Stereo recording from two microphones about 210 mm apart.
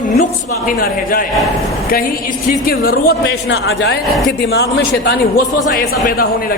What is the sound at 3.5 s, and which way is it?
Speech, 65° left (ahead or behind).